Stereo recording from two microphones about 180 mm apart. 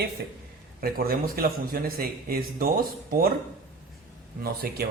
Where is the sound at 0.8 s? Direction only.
55° right (ahead or behind).